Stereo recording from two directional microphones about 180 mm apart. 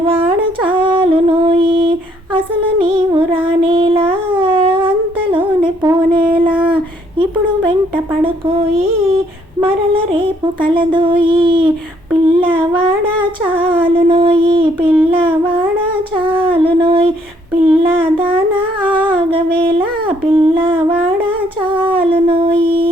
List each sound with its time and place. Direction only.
0.1 s music: 30° right (ahead or behind)
2.8 s child singing: 30° right (ahead or behind)
4.3 s humming: 30° right (ahead or behind)
6.1 s a sound: 30° right (ahead or behind)
8.2 s female singing: 35° right (ahead or behind)
12.2 s child singing: 30° right (ahead or behind)
13.6 s a sound: 30° right (ahead or behind)
15.1 s humming: 30° right (ahead or behind)
17.7 s child singing: 30° right (ahead or behind)
18.3 s humming: 10° right (ahead or behind)
18.9 s humming: 25° right (ahead or behind)
20.7 s humming: 10° right (ahead or behind)
21.2 s humming: 30° right (ahead or behind)
21.8 s howl: 30° right (ahead or behind)